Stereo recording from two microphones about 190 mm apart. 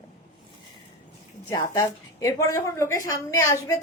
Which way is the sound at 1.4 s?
15° left (ahead or behind).